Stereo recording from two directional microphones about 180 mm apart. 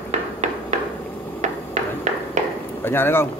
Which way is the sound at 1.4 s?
40° right (ahead or behind).